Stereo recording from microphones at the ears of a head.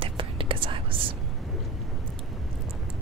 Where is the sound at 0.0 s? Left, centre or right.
Right.